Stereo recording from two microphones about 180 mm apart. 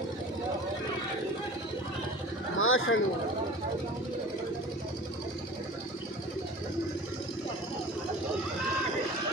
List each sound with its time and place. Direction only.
2.5 s bird: 90° left